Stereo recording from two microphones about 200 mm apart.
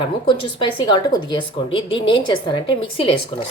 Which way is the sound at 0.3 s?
25° left (ahead or behind).